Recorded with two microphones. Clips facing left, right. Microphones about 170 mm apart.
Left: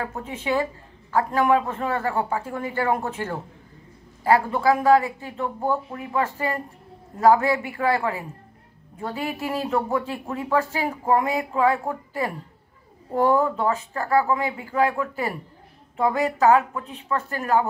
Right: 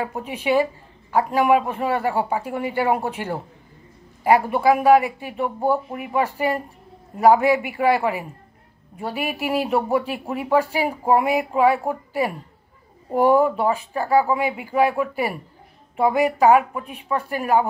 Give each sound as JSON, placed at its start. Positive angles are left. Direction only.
{"t": 0.0, "sound": "speech", "side_deg": -15}